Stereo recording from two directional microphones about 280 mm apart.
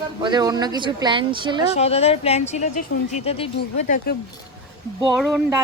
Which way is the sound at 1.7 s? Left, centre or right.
Left.